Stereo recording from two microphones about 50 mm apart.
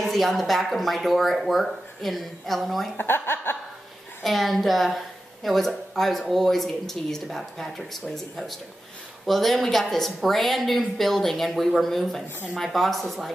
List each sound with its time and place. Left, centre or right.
0.0 s a woman's voice: centre
3.0 s speech: left
4.2 s a woman's voice: centre